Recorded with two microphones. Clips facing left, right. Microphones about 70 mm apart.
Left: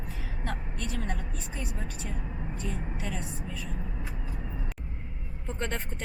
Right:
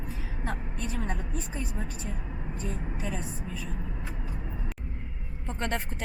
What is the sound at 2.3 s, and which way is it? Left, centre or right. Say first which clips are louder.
Vehicle: even; centre.